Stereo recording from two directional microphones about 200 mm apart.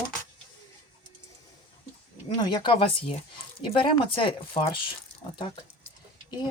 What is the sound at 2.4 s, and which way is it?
Speech, 25° left (ahead or behind).